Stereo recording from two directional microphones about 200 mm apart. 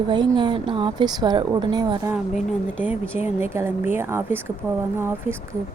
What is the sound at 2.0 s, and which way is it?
Speech, 5° right (ahead or behind).